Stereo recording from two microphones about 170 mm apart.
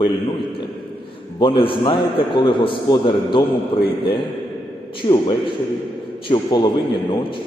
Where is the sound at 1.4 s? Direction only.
30° left (ahead or behind).